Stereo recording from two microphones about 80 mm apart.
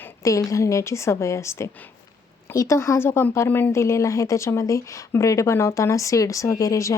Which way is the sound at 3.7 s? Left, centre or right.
Left.